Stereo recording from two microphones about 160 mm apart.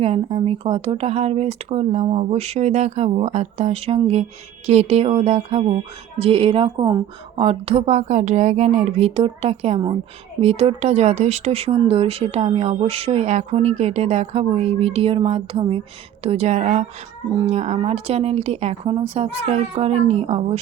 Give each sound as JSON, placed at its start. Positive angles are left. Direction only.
{"t": 0.0, "sound": "a woman's voice", "side_deg": -40}